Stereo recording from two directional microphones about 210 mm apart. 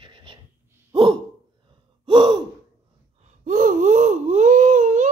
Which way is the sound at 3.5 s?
40° right (ahead or behind).